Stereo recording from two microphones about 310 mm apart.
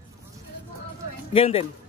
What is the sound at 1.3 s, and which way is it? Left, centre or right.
Speech, centre.